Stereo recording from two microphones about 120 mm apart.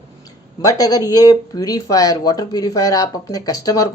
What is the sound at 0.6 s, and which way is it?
A woman's voice, 30° left (ahead or behind).